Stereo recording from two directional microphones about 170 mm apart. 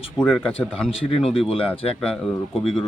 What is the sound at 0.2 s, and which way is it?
Speech, 5° left (ahead or behind).